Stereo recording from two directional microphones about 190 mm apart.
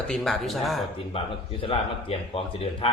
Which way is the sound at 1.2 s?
30° left (ahead or behind).